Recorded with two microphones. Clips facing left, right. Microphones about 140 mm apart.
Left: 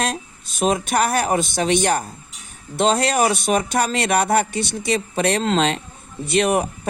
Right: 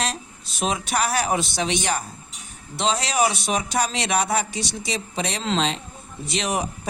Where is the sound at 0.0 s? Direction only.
50° left (ahead or behind).